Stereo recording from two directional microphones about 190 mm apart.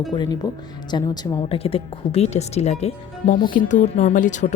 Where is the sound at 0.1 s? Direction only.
25° left (ahead or behind).